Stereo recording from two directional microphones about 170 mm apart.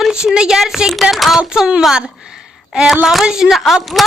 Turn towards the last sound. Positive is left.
turn(degrees=0)  # may be behind; listen again after turning